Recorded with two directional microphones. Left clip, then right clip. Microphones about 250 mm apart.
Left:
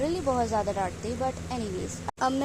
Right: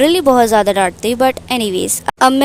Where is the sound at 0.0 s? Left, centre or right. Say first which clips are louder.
Right 17 dB; right.